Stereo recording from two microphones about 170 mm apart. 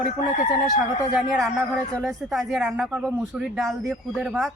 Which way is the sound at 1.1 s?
Centre (ahead or behind).